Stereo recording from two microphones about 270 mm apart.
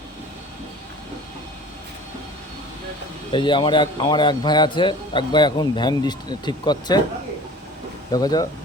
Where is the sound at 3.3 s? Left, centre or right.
Centre.